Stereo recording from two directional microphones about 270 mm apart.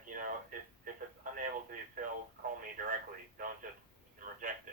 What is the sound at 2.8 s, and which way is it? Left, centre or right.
Speech, right.